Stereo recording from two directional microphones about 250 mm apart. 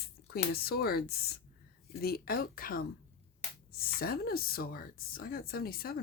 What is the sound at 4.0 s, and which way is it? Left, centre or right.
Speech, left.